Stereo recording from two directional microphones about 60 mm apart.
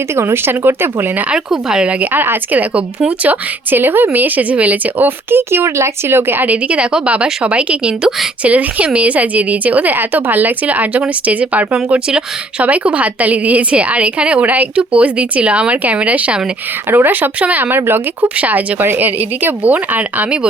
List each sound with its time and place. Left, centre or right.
0.2 s a woman's voice: right
1.3 s a woman's voice: centre
12.6 s a woman's voice: right
16.9 s a woman's voice: right